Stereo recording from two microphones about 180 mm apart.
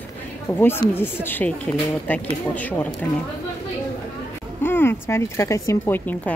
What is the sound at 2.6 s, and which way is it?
Speech, 10° left (ahead or behind).